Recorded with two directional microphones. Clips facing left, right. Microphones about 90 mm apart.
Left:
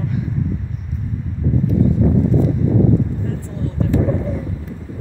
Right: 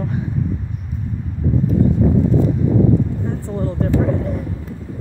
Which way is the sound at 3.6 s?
40° right (ahead or behind).